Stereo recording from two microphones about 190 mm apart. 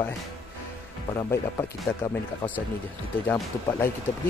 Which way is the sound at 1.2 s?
15° left (ahead or behind).